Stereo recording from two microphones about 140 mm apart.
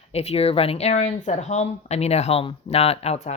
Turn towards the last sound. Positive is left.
turn(degrees=50)  # may be behind; listen again after turning